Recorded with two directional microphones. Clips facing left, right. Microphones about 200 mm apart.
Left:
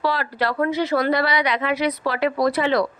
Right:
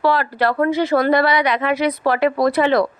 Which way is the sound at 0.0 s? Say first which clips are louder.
Right 5 dB; 55° right (ahead or behind).